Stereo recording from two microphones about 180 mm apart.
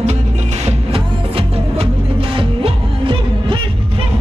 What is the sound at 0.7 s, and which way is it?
Music, 30° right (ahead or behind).